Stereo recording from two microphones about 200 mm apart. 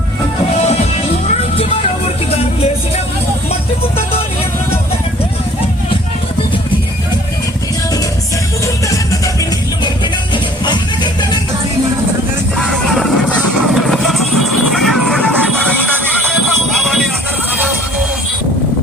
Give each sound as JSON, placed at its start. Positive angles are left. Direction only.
{"t": 8.6, "sound": "music", "side_deg": 15}
{"t": 12.5, "sound": "music", "side_deg": 0}